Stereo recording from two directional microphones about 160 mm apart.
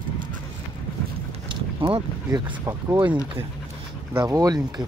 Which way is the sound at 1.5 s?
30° right (ahead or behind).